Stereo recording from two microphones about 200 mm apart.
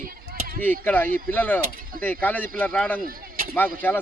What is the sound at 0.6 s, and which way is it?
A man's voice, 10° left (ahead or behind).